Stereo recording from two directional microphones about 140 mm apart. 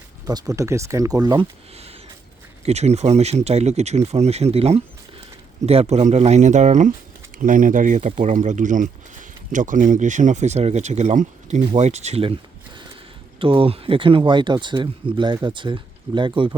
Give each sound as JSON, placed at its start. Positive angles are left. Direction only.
{"t": 0.3, "sound": "speech", "side_deg": -25}
{"t": 1.7, "sound": "a sound", "side_deg": -45}
{"t": 2.6, "sound": "speech", "side_deg": -50}
{"t": 7.4, "sound": "speech", "side_deg": -70}